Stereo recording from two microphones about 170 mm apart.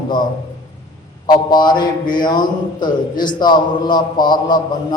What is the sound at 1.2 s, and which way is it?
A man's voice, 25° left (ahead or behind).